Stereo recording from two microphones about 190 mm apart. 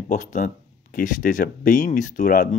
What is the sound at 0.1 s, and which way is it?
Speech, 40° left (ahead or behind).